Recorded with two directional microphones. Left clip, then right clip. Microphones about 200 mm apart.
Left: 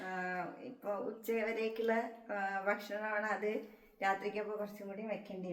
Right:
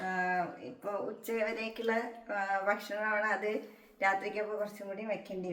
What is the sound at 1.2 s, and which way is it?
Speech, 15° left (ahead or behind).